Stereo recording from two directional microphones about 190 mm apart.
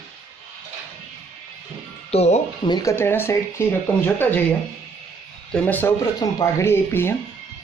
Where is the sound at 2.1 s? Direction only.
35° left (ahead or behind).